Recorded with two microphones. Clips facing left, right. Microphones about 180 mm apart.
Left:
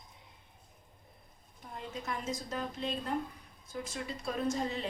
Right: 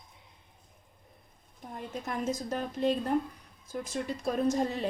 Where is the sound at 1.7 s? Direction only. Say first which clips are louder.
Right 4 dB; 50° right (ahead or behind).